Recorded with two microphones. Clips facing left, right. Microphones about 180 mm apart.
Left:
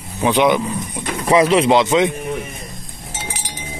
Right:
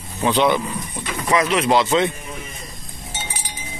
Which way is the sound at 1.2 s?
30° left (ahead or behind).